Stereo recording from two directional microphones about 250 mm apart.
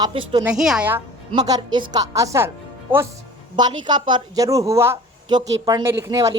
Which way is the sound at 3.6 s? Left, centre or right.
Centre.